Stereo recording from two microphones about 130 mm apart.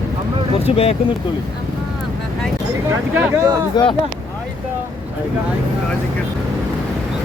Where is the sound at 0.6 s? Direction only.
50° left (ahead or behind).